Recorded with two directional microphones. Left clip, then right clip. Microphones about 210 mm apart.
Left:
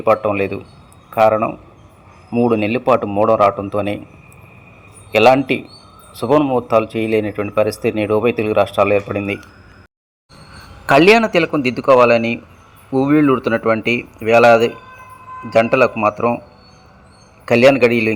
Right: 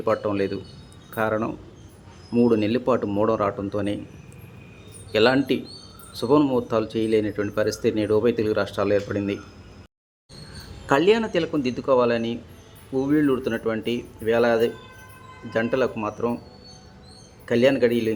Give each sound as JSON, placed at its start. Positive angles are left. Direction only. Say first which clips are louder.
{"t": 0.0, "sound": "a man's voice", "louder": "left 8 dB", "side_deg": 5}
{"t": 5.1, "sound": "speech", "louder": "left 8 dB", "side_deg": 5}
{"t": 10.8, "sound": "speech", "louder": "left 9 dB", "side_deg": 25}
{"t": 17.4, "sound": "speech", "louder": "left 8 dB", "side_deg": 20}